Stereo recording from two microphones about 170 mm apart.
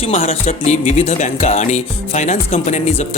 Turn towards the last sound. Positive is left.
turn(degrees=45)  # may be behind; listen again after turning